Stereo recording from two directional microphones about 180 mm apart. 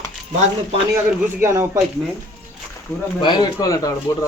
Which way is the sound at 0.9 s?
15° right (ahead or behind).